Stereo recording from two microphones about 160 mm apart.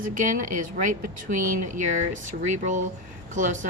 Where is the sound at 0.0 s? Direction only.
55° right (ahead or behind).